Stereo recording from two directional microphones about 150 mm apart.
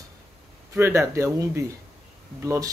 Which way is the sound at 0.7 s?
20° right (ahead or behind).